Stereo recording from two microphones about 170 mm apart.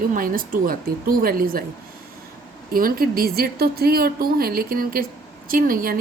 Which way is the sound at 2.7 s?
60° right (ahead or behind).